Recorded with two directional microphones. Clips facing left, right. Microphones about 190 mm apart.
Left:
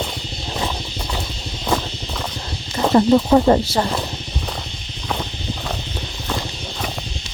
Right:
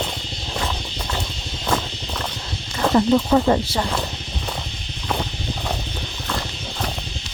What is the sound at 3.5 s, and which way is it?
Speech, 40° left (ahead or behind).